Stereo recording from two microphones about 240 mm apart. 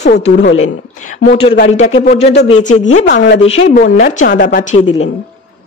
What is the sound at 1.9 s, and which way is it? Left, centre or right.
Speech, left.